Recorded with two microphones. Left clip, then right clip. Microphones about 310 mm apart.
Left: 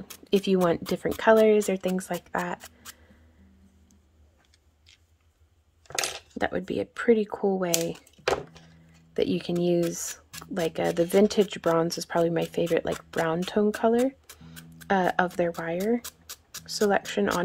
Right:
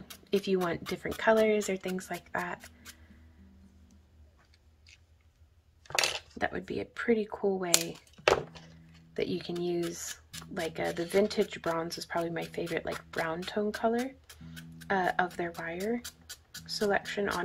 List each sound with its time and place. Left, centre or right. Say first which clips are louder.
0.1 s speech: left 5 dB; left
6.3 s speech: left 5 dB; left
9.1 s speech: left 7 dB; left
16.0 s music: left 3 dB; centre
16.6 s speech: left 5 dB; left